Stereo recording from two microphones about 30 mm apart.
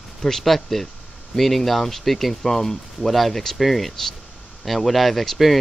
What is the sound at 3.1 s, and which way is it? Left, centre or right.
Speech, centre.